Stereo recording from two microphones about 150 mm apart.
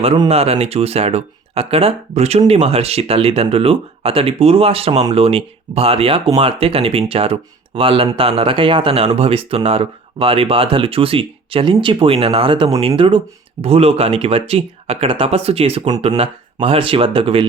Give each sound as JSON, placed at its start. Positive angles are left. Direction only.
{"t": 0.3, "sound": "speech", "side_deg": -45}